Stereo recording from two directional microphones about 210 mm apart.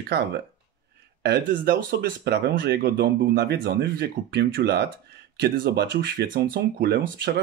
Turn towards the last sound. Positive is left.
turn(degrees=-50)  # may be behind; listen again after turning